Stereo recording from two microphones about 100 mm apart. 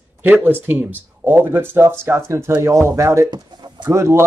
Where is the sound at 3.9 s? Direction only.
30° right (ahead or behind).